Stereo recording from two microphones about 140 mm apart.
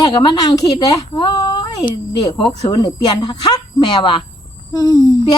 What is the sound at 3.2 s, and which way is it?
A woman's voice, 35° left (ahead or behind).